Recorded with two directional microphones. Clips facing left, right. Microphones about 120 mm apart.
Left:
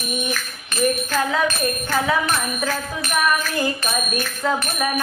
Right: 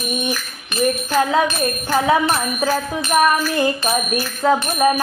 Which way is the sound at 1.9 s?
30° right (ahead or behind).